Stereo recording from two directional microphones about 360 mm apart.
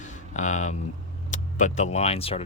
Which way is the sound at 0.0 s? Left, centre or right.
Centre.